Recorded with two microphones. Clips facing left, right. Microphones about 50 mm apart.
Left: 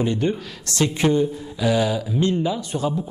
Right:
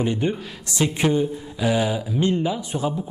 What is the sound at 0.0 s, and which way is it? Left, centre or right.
A man's voice, centre.